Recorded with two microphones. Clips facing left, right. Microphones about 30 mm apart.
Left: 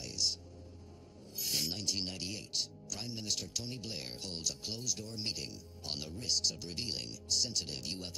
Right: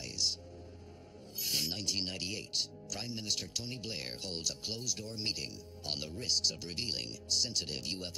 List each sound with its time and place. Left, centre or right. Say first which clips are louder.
1.4 s speech: right 1 dB; centre